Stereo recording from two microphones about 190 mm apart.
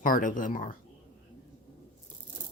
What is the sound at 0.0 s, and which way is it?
Speech, 45° left (ahead or behind).